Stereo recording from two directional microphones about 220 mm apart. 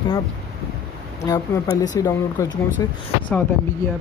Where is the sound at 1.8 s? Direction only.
15° left (ahead or behind).